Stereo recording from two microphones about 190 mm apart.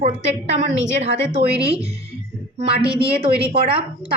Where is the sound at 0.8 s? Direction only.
65° right (ahead or behind).